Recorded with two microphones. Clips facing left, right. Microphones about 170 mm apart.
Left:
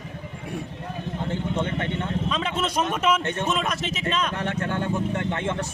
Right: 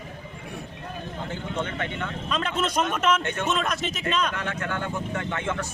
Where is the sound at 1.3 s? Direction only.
25° left (ahead or behind).